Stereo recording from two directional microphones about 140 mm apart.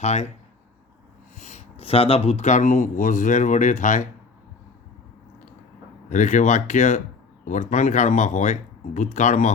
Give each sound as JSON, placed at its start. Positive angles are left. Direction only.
{"t": 0.0, "sound": "speech", "side_deg": 50}
{"t": 1.4, "sound": "speech", "side_deg": 55}
{"t": 6.1, "sound": "speech", "side_deg": 60}